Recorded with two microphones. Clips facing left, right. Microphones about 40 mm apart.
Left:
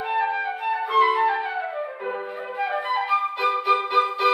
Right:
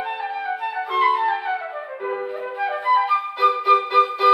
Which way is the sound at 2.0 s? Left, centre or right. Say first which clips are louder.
Right 3 dB; centre.